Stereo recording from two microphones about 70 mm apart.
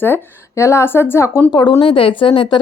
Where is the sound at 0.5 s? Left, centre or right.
Left.